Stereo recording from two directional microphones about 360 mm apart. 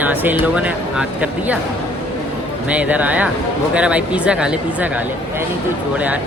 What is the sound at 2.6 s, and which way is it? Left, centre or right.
Speech, centre.